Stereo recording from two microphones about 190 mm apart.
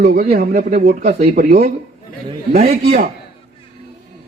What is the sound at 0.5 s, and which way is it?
Speech, 40° right (ahead or behind).